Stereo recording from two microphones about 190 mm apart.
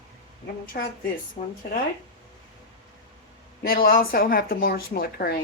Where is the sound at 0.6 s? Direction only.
50° left (ahead or behind).